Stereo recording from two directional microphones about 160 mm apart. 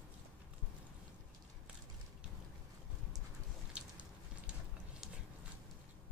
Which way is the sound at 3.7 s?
10° right (ahead or behind).